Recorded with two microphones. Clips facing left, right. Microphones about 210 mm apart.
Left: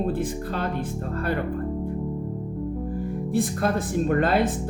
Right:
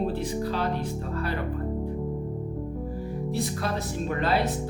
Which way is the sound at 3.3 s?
50° left (ahead or behind).